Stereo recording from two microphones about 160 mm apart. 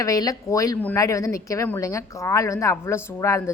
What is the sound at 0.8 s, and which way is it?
Speech, 10° left (ahead or behind).